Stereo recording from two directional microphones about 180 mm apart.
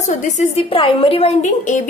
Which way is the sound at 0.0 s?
40° left (ahead or behind).